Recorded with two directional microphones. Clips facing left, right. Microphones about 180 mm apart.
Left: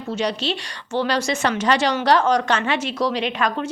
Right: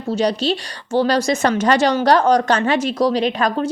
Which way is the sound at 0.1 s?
35° right (ahead or behind).